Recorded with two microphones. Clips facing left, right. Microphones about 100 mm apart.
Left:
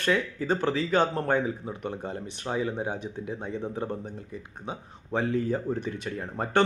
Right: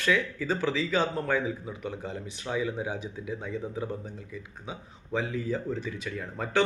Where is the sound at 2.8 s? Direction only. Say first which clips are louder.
Left 2 dB; 55° left (ahead or behind).